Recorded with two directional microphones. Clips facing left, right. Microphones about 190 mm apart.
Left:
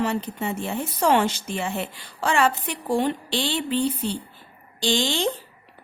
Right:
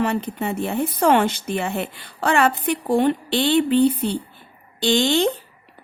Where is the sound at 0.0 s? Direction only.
60° right (ahead or behind).